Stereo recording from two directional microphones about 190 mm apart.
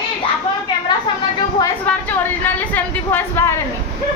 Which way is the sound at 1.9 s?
5° left (ahead or behind).